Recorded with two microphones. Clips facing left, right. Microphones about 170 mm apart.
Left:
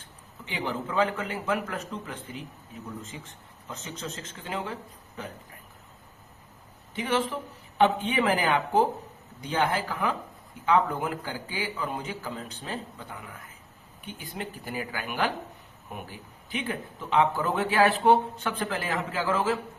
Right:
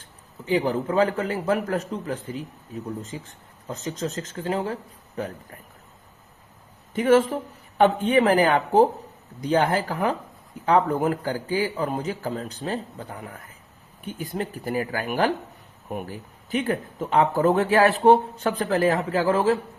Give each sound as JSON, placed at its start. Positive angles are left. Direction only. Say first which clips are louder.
{"t": 0.4, "sound": "speech", "louder": "right 9 dB", "side_deg": -40}
{"t": 6.9, "sound": "speech", "louder": "right 9 dB", "side_deg": -45}